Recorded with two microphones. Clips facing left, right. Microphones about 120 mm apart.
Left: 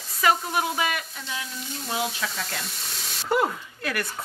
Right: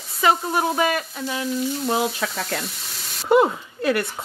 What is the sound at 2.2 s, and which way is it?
Speech, 45° right (ahead or behind).